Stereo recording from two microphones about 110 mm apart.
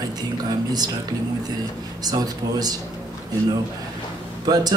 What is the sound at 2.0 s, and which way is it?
Speech, 35° right (ahead or behind).